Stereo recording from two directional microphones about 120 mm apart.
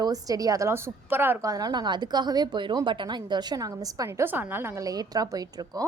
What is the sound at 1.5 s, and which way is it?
A woman's voice, 30° right (ahead or behind).